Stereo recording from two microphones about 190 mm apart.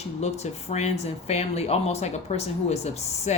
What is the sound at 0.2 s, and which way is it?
Speech, 35° left (ahead or behind).